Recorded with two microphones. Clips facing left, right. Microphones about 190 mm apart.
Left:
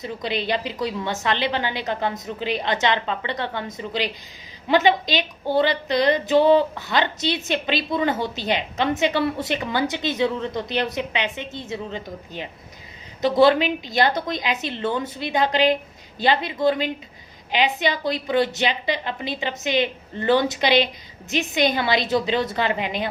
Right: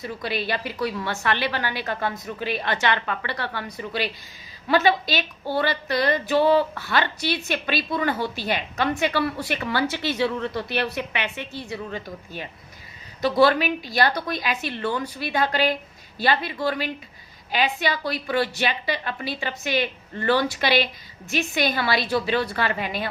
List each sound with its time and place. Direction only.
0.0 s a woman's voice: 20° left (ahead or behind)